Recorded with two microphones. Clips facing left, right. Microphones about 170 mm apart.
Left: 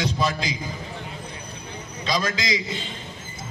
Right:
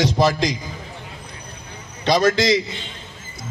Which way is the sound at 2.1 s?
70° right (ahead or behind).